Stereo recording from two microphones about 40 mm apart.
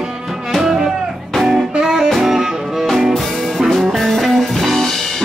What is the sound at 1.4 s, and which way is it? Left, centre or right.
Music, centre.